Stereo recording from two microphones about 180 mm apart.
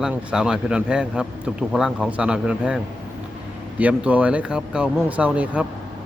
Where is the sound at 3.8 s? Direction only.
10° right (ahead or behind).